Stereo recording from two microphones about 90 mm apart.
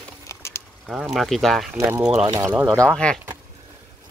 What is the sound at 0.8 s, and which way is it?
Speech, 5° right (ahead or behind).